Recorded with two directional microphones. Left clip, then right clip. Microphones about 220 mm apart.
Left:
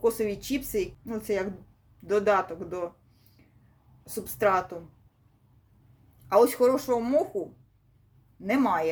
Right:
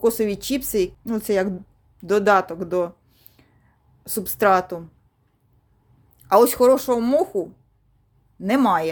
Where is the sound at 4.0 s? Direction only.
50° right (ahead or behind).